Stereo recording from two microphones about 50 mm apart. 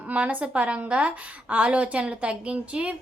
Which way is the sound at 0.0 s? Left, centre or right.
Right.